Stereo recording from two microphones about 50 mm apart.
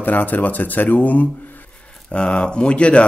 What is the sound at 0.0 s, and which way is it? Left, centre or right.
Speech, left.